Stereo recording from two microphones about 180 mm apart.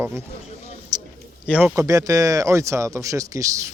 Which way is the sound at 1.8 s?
20° right (ahead or behind).